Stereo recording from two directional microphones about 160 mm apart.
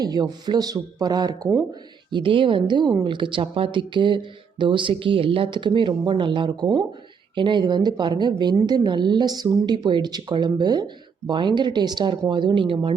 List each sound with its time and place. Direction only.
0.0 s a woman's voice: 25° right (ahead or behind)